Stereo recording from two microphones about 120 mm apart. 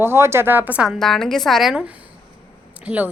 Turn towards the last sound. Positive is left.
turn(degrees=-10)  # may be behind; listen again after turning